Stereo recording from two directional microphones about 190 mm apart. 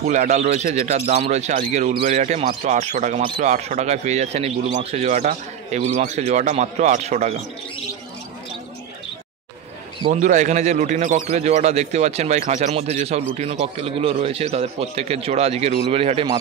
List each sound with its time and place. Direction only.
0.0 s speech: 40° right (ahead or behind)
10.1 s speech: 40° right (ahead or behind)